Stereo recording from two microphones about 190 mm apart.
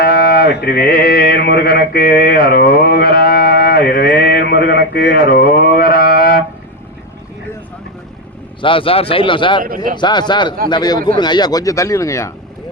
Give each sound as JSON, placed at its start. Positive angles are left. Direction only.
{"t": 0.0, "sound": "mantra", "side_deg": 55}
{"t": 8.6, "sound": "speech", "side_deg": 30}
{"t": 9.6, "sound": "speech", "side_deg": -45}
{"t": 10.0, "sound": "speech", "side_deg": 25}